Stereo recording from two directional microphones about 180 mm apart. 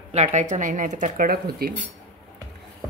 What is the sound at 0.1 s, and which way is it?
Speech, 40° right (ahead or behind).